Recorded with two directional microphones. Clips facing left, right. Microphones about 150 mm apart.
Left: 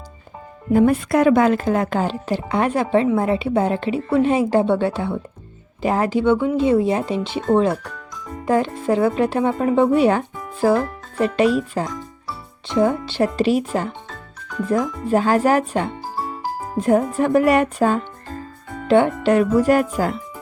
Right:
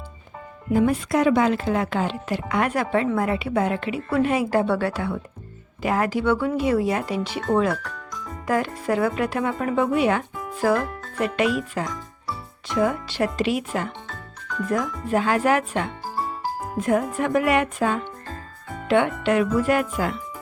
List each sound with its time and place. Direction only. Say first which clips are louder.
0.7 s speech: left 4 dB; 55° left (ahead or behind); by 20.2 s 40° left (ahead or behind)